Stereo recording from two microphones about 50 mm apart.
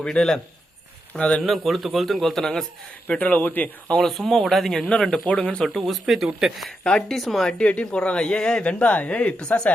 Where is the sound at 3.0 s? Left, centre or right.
Left.